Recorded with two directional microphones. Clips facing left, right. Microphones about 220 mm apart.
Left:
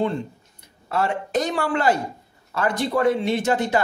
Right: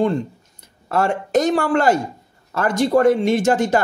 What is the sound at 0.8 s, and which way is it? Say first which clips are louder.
Speech: right 4 dB; 45° right (ahead or behind).